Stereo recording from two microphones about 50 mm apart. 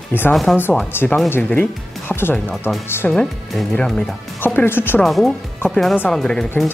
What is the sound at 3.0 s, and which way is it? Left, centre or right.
Speech, centre.